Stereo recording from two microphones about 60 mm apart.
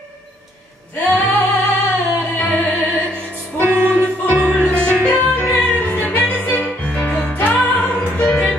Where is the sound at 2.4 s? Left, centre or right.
Left.